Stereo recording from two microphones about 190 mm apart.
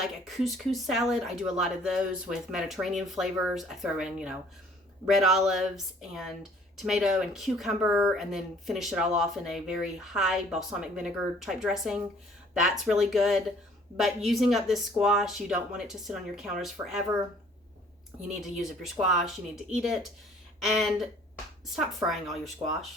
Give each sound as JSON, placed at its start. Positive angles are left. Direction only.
{"t": 0.0, "sound": "speech", "side_deg": 0}
{"t": 18.2, "sound": "speech", "side_deg": 0}
{"t": 22.6, "sound": "speech", "side_deg": -25}